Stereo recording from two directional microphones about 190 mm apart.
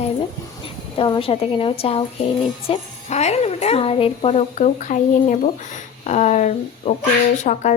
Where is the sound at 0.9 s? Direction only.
25° left (ahead or behind).